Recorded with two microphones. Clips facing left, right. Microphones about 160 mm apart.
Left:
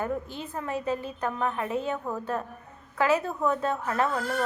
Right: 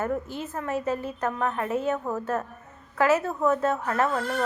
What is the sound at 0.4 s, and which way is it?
A woman's voice, 15° left (ahead or behind).